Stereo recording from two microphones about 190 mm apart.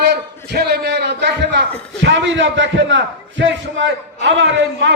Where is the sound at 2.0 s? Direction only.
70° right (ahead or behind).